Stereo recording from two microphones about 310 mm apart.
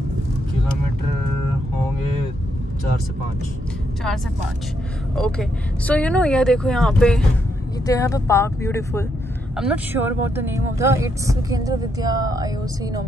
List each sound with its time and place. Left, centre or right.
5.1 s speech: centre
9.6 s speech: centre